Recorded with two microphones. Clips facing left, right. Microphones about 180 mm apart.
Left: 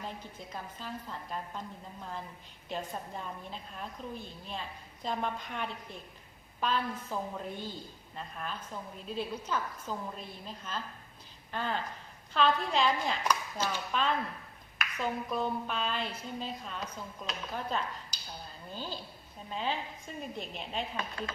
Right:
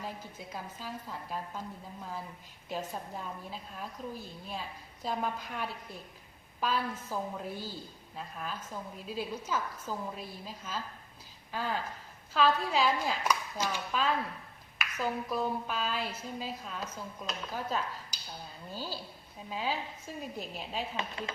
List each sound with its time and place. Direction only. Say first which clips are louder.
0.0 s a woman's voice: right 1 dB; 5° right (ahead or behind)
20.9 s chopping: even; 25° right (ahead or behind)